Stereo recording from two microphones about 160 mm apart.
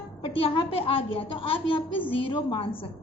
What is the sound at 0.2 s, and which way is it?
A woman's voice, 35° left (ahead or behind).